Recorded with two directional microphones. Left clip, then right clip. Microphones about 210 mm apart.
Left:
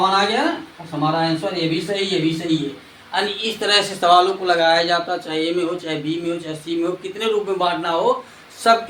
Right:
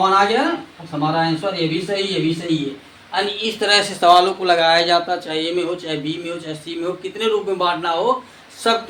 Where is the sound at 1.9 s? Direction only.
10° right (ahead or behind).